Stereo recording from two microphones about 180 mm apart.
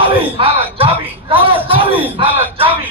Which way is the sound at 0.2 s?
30° right (ahead or behind).